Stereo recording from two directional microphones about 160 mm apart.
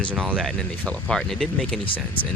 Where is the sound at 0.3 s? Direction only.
5° right (ahead or behind).